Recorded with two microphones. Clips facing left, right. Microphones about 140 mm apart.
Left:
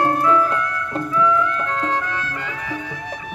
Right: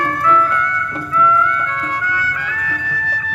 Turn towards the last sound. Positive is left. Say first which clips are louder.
# right 3 dB
turn(degrees=20)  # may be behind; listen again after turning